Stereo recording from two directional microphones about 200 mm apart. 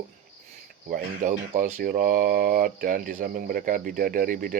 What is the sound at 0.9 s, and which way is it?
A man's voice, 40° right (ahead or behind).